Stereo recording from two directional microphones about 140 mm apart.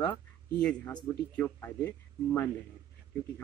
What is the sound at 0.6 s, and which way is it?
Speech, 10° left (ahead or behind).